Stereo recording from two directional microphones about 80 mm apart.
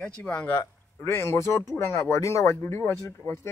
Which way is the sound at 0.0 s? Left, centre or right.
Centre.